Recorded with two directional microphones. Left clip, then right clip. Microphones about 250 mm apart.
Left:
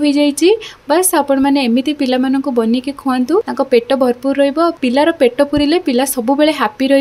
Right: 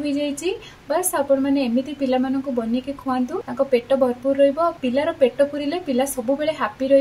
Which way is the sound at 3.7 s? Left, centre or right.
Left.